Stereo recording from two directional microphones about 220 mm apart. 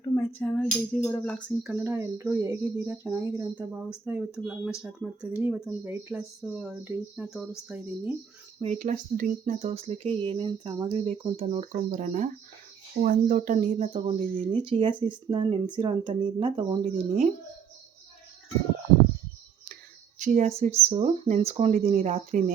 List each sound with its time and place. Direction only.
0.1 s speech: 10° left (ahead or behind)
1.7 s speech: 10° right (ahead or behind)
8.6 s speech: 35° right (ahead or behind)
20.1 s speech: 35° right (ahead or behind)